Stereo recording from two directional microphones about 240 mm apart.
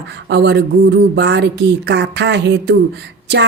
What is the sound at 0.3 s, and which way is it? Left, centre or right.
A woman's voice, right.